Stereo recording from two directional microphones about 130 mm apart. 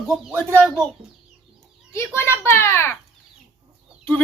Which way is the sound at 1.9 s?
20° left (ahead or behind).